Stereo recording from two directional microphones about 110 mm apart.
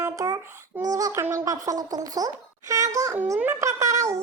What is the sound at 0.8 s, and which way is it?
A child's voice, 30° right (ahead or behind).